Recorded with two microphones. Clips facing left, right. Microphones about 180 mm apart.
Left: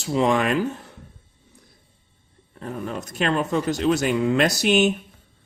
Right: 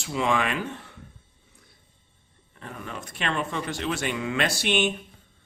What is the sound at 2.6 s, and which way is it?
Speech, 40° left (ahead or behind).